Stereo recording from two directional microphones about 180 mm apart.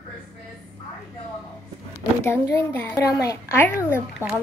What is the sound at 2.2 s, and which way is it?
Speech, 15° left (ahead or behind).